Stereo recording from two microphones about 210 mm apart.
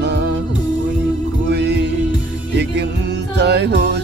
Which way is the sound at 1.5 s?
55° right (ahead or behind).